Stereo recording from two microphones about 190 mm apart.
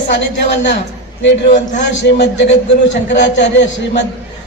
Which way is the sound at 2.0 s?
65° left (ahead or behind).